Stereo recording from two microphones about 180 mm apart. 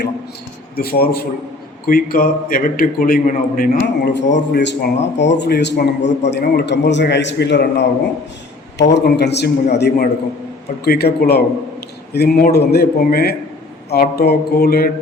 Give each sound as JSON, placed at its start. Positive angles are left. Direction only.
{"t": 0.8, "sound": "a man's voice", "side_deg": 55}
{"t": 8.9, "sound": "a man's voice", "side_deg": 70}